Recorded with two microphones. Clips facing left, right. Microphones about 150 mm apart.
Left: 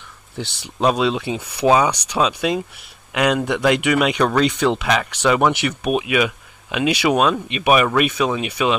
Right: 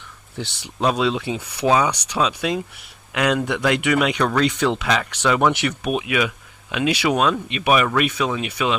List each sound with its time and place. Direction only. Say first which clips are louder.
0.4 s speech: left 2 dB; 20° left (ahead or behind)